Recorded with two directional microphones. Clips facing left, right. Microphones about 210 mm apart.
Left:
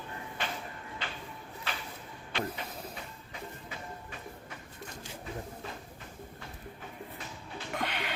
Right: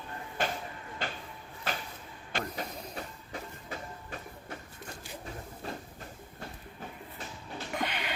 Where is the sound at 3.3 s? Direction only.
40° right (ahead or behind).